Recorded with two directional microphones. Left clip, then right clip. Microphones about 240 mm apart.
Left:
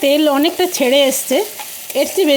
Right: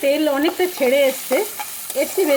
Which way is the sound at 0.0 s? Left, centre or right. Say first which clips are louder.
Left 4 dB; left.